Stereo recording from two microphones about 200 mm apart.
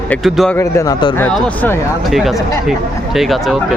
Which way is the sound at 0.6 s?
15° left (ahead or behind).